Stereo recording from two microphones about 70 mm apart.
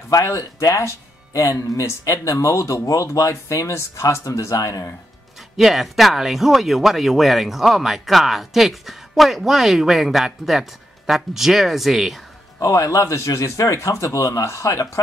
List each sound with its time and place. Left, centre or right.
0.1 s speech: left
2.3 s speech: left
5.6 s speech: centre
12.5 s speech: left